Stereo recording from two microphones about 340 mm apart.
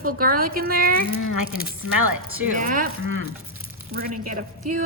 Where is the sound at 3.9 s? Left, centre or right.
Right.